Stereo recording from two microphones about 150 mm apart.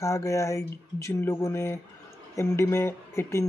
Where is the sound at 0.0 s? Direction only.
20° left (ahead or behind).